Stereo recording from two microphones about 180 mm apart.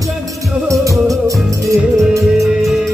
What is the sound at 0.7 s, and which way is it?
Music, 20° right (ahead or behind).